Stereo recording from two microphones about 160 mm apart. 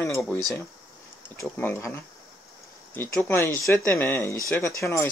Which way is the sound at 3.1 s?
15° left (ahead or behind).